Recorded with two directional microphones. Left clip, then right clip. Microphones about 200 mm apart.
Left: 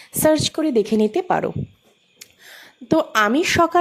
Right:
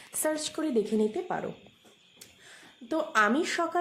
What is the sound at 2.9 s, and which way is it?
Speech, 35° left (ahead or behind).